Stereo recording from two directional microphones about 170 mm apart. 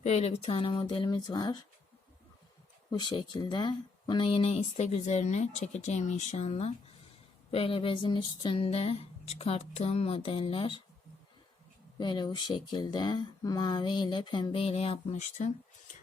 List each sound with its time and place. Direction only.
0.0 s speech: 40° left (ahead or behind); by 1.5 s 25° left (ahead or behind)
2.9 s speech: 25° left (ahead or behind)
11.9 s speech: 25° left (ahead or behind); by 15.5 s 45° left (ahead or behind)